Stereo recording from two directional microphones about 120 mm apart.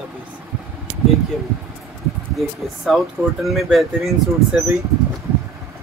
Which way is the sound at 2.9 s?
Centre (ahead or behind).